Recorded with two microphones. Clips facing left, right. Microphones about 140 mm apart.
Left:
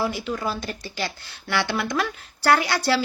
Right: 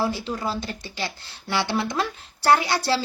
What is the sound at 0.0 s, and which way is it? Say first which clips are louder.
Speech: even; 30° right (ahead or behind).